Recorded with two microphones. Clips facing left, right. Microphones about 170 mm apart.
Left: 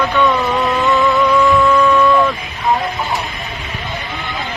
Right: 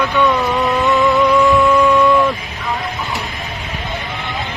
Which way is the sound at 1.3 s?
20° right (ahead or behind).